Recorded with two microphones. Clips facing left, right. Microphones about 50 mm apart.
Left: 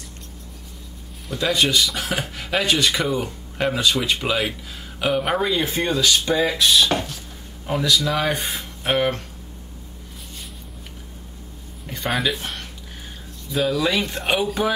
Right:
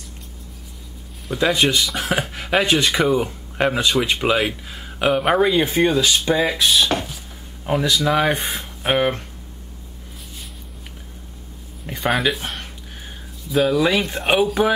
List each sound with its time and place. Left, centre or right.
1.3 s speech: centre
2.9 s speech: centre
7.6 s speech: centre
11.8 s a sound: centre
12.1 s speech: centre
13.7 s speech: centre